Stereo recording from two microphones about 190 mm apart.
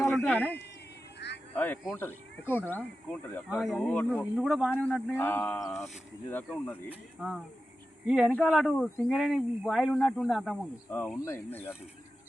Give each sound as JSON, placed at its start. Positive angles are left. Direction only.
{"t": 0.2, "sound": "a sound", "side_deg": 10}
{"t": 1.2, "sound": "music", "side_deg": 65}
{"t": 1.5, "sound": "speech", "side_deg": 10}
{"t": 5.1, "sound": "speech", "side_deg": 10}
{"t": 7.2, "sound": "speech", "side_deg": 0}